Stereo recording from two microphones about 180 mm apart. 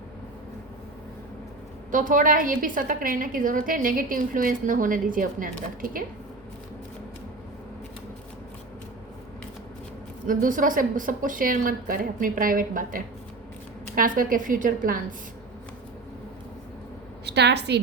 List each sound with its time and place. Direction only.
1.9 s a woman's voice: 45° right (ahead or behind)
10.2 s a woman's voice: 50° right (ahead or behind)
17.2 s a woman's voice: 70° right (ahead or behind)